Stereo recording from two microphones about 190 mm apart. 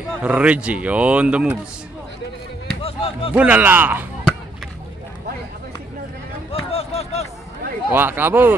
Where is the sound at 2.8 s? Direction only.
30° left (ahead or behind).